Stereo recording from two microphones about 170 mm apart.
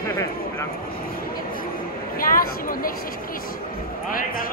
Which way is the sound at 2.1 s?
55° left (ahead or behind).